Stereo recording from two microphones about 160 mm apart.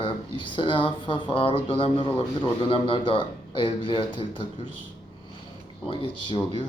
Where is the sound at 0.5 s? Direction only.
30° left (ahead or behind).